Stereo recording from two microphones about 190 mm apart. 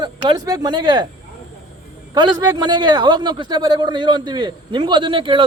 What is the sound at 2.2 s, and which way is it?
A man's voice, 20° right (ahead or behind).